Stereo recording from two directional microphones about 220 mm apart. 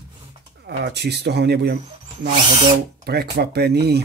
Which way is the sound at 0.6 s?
50° right (ahead or behind).